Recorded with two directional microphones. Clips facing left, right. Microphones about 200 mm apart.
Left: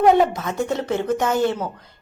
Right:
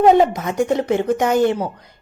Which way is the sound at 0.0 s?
15° right (ahead or behind).